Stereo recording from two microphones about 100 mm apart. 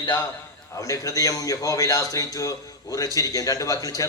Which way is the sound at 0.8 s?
35° left (ahead or behind).